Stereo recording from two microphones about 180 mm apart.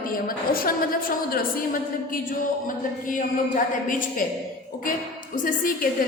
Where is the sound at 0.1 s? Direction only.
55° left (ahead or behind).